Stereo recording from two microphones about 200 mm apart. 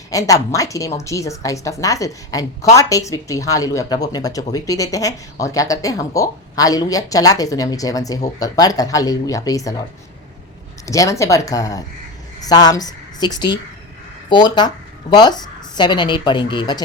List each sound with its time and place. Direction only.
0.1 s speech: 15° left (ahead or behind)
10.8 s a woman's voice: 15° left (ahead or behind)